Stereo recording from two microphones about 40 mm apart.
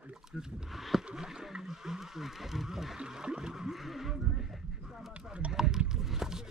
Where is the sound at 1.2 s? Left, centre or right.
Centre.